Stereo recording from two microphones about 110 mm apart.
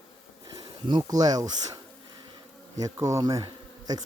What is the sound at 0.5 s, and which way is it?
Speech, 40° right (ahead or behind).